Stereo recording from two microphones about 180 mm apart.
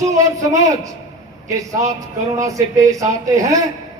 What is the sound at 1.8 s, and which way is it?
Speech, 20° right (ahead or behind).